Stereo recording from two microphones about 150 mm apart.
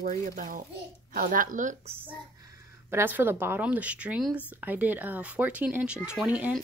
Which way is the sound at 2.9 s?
15° right (ahead or behind).